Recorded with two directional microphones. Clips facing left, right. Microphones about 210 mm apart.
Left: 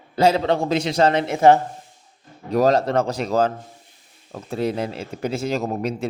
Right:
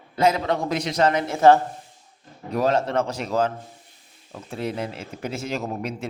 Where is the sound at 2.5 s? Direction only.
40° left (ahead or behind).